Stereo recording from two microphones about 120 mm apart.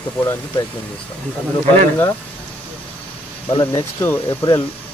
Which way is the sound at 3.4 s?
40° left (ahead or behind).